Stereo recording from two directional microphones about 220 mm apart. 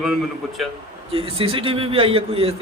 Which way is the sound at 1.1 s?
25° right (ahead or behind).